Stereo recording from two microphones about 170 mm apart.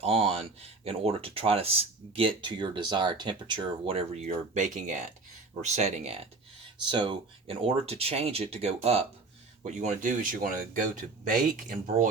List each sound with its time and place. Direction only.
0.0 s speech: 35° right (ahead or behind)
6.9 s speech: 30° right (ahead or behind); by 12.0 s 50° right (ahead or behind)